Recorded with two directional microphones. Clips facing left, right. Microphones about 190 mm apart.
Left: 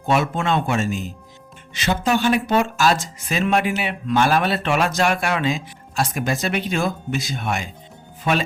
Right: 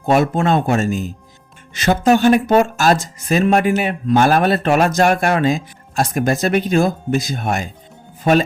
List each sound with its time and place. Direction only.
0.0 s a man's voice: 40° right (ahead or behind)